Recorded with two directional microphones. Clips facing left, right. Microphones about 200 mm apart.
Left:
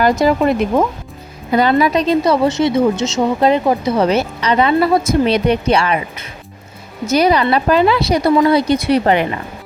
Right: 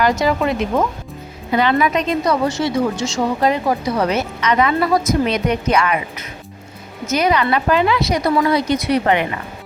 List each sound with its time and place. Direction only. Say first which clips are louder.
0.2 s a woman's voice: left 4 dB; 40° left (ahead or behind)